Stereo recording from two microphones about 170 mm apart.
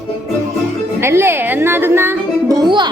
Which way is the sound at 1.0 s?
15° right (ahead or behind).